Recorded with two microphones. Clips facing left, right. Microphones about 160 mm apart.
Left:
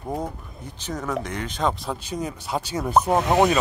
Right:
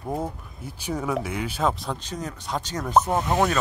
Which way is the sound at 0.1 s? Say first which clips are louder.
Even; 5° right (ahead or behind).